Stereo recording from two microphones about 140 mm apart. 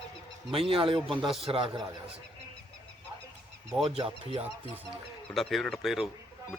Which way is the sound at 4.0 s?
40° right (ahead or behind).